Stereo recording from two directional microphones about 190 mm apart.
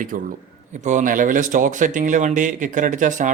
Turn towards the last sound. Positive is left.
turn(degrees=-40)  # may be behind; listen again after turning